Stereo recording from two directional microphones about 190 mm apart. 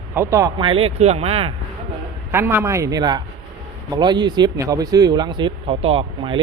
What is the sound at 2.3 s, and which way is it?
Speech, 10° right (ahead or behind).